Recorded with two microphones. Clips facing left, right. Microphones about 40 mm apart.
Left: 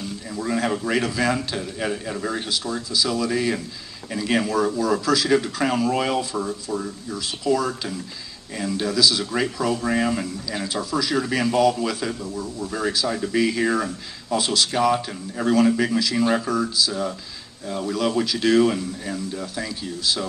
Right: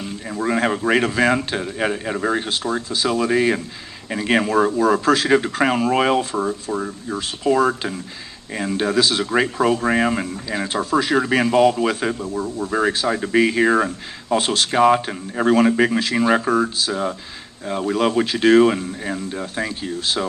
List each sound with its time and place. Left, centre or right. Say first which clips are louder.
0.0 s speech: right 4 dB; right